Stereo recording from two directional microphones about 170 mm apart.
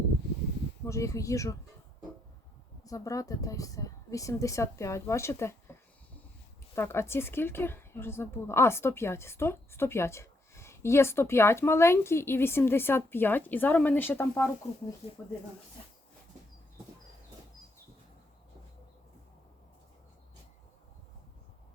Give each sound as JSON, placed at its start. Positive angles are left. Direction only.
{"t": 0.9, "sound": "speech", "side_deg": 20}
{"t": 2.8, "sound": "speech", "side_deg": 20}
{"t": 6.7, "sound": "speech", "side_deg": 15}